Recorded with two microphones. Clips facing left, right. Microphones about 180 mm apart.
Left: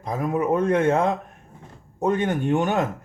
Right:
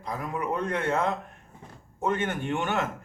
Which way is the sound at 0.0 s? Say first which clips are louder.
Left 8 dB; 45° left (ahead or behind).